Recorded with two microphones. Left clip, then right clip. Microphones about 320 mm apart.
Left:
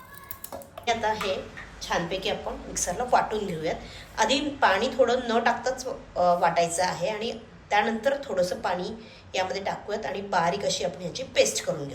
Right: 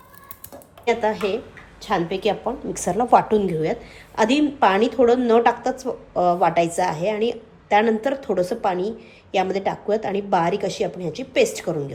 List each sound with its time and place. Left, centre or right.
0.9 s a woman's voice: right